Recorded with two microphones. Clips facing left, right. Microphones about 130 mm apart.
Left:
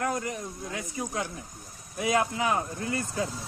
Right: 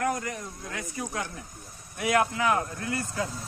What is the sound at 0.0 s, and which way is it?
Speech, 25° left (ahead or behind).